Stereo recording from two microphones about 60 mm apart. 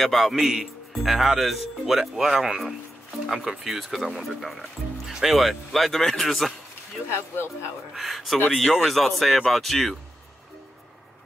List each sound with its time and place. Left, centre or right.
0.0 s a man's voice: centre
7.1 s speech: left
7.9 s a man's voice: centre